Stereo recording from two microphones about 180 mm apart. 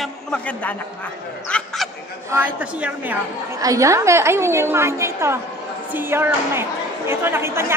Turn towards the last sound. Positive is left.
turn(degrees=-15)  # may be behind; listen again after turning